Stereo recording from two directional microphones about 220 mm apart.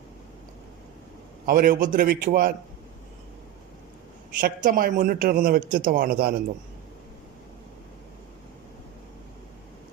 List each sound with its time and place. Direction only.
1.5 s a man's voice: 40° right (ahead or behind)
4.4 s a man's voice: 40° right (ahead or behind)